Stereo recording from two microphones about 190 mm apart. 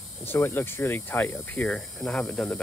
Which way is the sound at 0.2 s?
10° left (ahead or behind).